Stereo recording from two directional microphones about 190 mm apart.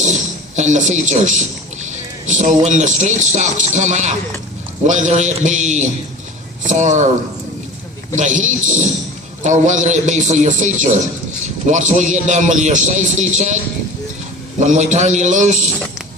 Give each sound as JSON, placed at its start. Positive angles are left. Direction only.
{"t": 0.0, "sound": "a sound", "side_deg": -40}
{"t": 2.6, "sound": "a man's voice", "side_deg": -40}
{"t": 8.2, "sound": "a man's voice", "side_deg": -40}
{"t": 14.6, "sound": "a man's voice", "side_deg": -40}